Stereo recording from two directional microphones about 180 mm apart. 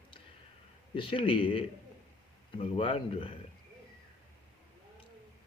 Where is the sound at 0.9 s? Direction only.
30° left (ahead or behind).